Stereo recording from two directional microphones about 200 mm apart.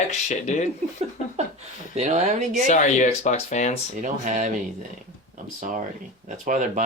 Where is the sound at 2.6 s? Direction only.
35° left (ahead or behind).